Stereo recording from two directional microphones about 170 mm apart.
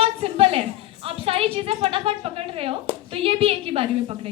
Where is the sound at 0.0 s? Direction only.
35° right (ahead or behind).